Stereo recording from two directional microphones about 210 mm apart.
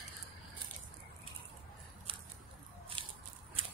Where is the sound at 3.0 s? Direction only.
25° right (ahead or behind).